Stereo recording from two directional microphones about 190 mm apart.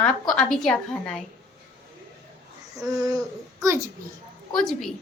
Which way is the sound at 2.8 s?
20° right (ahead or behind).